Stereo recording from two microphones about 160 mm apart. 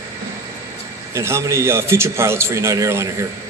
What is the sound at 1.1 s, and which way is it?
A man's voice, 15° right (ahead or behind).